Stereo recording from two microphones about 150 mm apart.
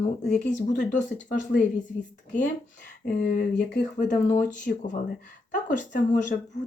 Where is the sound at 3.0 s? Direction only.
70° left (ahead or behind).